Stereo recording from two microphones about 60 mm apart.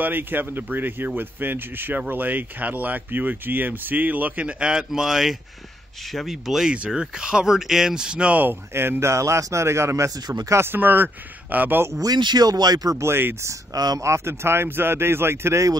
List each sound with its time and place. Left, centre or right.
0.0 s speech: right; by 8.4 s centre
8.4 s speech: right
9.1 s speech: right
10.5 s a man's voice: right
12.0 s speech: right
12.9 s speech: right
13.7 s speech: right
14.0 s speech: right